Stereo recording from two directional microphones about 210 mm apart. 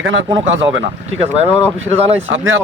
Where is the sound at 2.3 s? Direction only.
65° right (ahead or behind).